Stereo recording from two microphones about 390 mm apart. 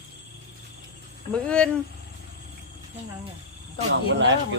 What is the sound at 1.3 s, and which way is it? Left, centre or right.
Speech, centre.